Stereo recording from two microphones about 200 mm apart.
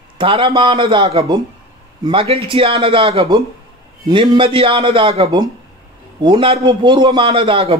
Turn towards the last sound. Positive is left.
turn(degrees=-30)  # may be behind; listen again after turning